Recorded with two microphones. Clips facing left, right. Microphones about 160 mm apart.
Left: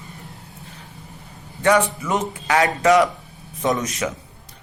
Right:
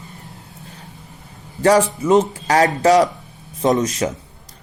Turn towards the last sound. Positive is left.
turn(degrees=-35)  # may be behind; listen again after turning